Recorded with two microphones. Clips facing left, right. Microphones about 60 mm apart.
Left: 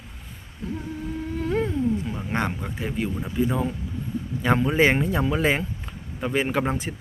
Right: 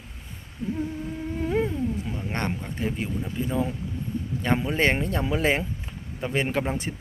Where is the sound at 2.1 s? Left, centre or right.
Centre.